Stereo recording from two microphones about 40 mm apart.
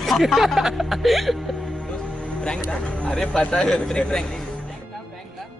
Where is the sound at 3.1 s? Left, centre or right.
Centre.